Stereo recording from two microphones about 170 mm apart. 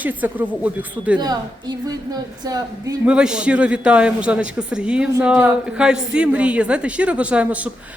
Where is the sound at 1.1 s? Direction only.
25° right (ahead or behind).